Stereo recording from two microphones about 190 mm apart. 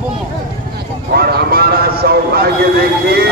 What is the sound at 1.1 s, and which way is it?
Clip-clop, 55° right (ahead or behind).